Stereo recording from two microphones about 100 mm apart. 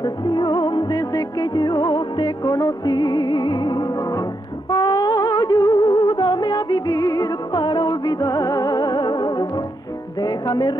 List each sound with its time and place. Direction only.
0.0 s music: 45° left (ahead or behind)